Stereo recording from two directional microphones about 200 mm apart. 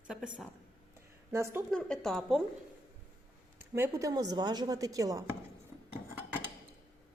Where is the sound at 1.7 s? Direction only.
5° left (ahead or behind).